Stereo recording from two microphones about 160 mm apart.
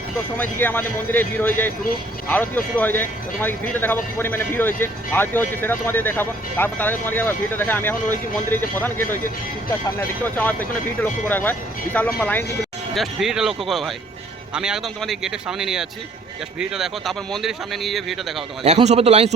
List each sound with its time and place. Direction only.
0.3 s speech: 10° left (ahead or behind)
10.3 s speech: 10° left (ahead or behind)
12.9 s a man's voice: centre (ahead or behind)
18.6 s a man's voice: 45° right (ahead or behind)